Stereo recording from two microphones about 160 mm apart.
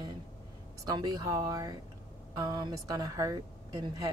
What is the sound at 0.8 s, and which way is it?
A woman's voice, 25° right (ahead or behind).